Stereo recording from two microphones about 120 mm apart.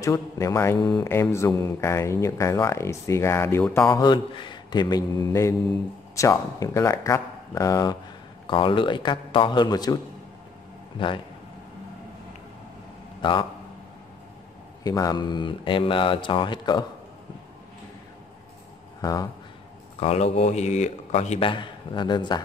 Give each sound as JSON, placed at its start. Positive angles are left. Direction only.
{"t": 0.0, "sound": "speech", "side_deg": 25}
{"t": 0.7, "sound": "speech", "side_deg": 35}
{"t": 1.0, "sound": "speech", "side_deg": 20}
{"t": 3.9, "sound": "speech", "side_deg": 40}
{"t": 8.5, "sound": "speech", "side_deg": 45}
{"t": 13.2, "sound": "speech", "side_deg": 45}
{"t": 14.8, "sound": "speech", "side_deg": 30}
{"t": 18.9, "sound": "speech", "side_deg": 30}
{"t": 20.0, "sound": "speech", "side_deg": 60}
{"t": 21.5, "sound": "speech", "side_deg": 40}